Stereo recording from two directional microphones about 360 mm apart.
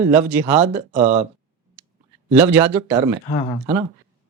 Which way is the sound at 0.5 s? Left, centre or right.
Centre.